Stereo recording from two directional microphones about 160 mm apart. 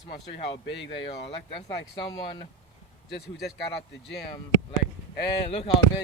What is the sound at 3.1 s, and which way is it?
Speech, 90° left.